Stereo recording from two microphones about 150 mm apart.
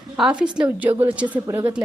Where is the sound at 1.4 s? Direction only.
20° right (ahead or behind).